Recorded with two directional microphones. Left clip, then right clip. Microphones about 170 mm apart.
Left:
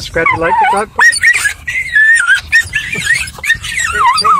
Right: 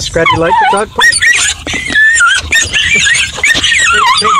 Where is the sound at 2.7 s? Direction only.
15° right (ahead or behind).